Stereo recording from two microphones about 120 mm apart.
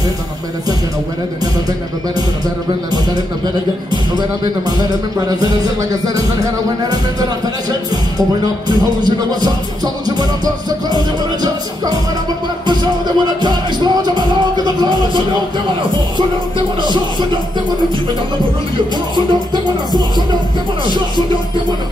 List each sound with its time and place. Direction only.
2.1 s speech: 35° right (ahead or behind)
8.6 s speech: 35° right (ahead or behind)
12.6 s music: 35° right (ahead or behind)
16.8 s speech: 40° right (ahead or behind)
19.1 s speech: 35° right (ahead or behind)